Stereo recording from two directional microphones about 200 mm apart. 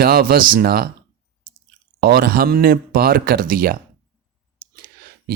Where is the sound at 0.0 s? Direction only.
50° right (ahead or behind).